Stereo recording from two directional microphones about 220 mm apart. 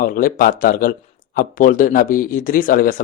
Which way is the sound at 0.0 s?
40° left (ahead or behind).